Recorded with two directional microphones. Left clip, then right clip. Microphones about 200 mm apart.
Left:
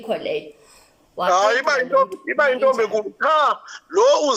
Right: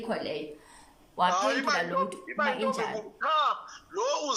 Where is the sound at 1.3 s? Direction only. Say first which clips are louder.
Left 13 dB; 35° left (ahead or behind).